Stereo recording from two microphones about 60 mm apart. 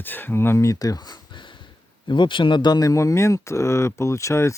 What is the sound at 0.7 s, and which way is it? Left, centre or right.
Speech, left.